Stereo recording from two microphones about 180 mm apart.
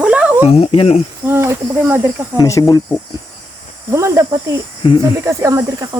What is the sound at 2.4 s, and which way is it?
Speech, 15° left (ahead or behind).